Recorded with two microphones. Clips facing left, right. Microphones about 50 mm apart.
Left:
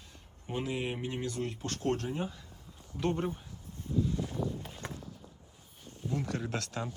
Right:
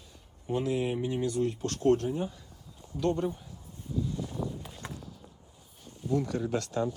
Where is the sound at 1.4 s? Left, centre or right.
Left.